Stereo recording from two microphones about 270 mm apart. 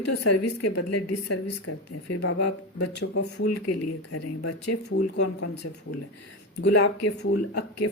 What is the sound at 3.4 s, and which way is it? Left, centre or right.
Speech, left.